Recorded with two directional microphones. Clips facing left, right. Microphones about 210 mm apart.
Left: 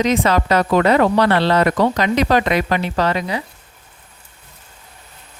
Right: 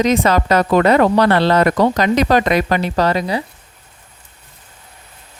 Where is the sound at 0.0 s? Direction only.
40° right (ahead or behind).